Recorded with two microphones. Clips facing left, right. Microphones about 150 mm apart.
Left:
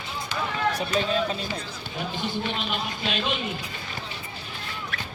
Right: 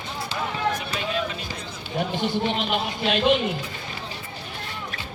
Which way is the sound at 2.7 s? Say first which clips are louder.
Right 5 dB; 60° right (ahead or behind).